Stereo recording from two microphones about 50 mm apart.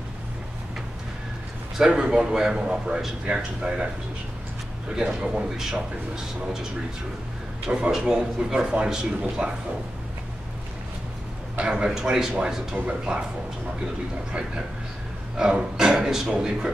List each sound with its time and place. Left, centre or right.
1.9 s a man's voice: centre
4.9 s a man's voice: centre
11.5 s a man's voice: right
15.3 s a man's voice: centre